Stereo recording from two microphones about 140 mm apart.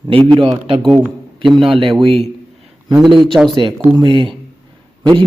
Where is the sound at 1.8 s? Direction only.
40° right (ahead or behind).